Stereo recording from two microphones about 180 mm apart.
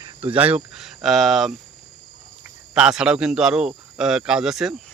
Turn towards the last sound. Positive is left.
turn(degrees=0)  # may be behind; listen again after turning